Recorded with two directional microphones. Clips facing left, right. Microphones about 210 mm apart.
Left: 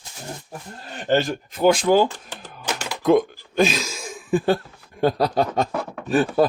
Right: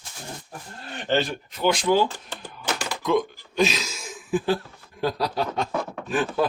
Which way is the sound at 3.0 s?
55° left (ahead or behind).